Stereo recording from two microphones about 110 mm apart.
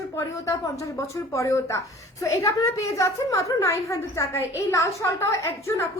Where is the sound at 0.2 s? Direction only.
25° left (ahead or behind).